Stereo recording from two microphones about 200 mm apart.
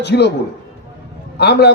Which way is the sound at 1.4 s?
55° left (ahead or behind).